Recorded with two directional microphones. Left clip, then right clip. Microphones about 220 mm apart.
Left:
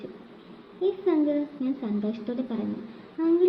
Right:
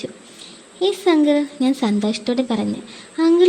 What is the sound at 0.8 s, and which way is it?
A woman's voice, 50° right (ahead or behind).